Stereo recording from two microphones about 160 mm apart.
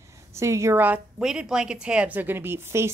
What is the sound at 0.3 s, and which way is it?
A woman's voice, 15° right (ahead or behind).